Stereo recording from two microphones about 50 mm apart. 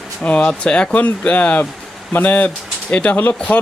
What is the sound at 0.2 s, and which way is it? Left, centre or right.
Speech, left.